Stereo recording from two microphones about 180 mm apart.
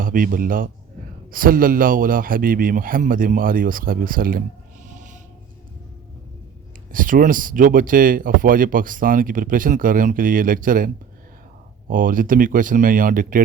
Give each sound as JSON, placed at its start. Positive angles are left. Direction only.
{"t": 0.0, "sound": "speech", "side_deg": -50}
{"t": 4.9, "sound": "a sound", "side_deg": -45}
{"t": 6.9, "sound": "speech", "side_deg": -50}